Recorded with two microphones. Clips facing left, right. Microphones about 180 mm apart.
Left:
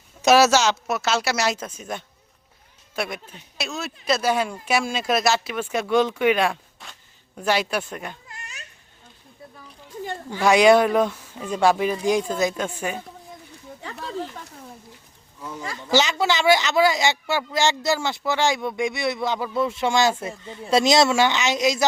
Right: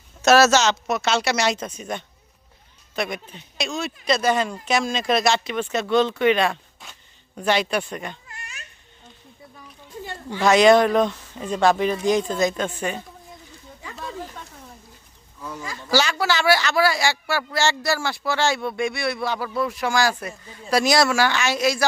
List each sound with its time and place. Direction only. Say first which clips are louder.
0.2 s speech: even; 10° left (ahead or behind)
10.4 s speech: right 1 dB; 10° left (ahead or behind)
15.8 s speech: left 1 dB; 20° left (ahead or behind)